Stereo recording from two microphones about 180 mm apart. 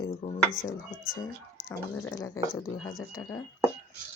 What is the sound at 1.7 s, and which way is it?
Speech, 15° left (ahead or behind).